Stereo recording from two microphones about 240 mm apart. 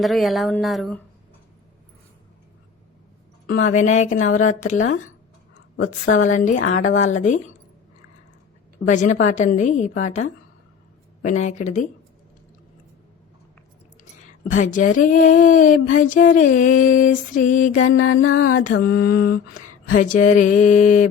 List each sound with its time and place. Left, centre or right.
0.0 s speech: centre
3.4 s speech: left
6.1 s speech: left
8.9 s speech: left
11.2 s speech: left
14.5 s speech: left
17.6 s mantra: left
18.8 s speech: left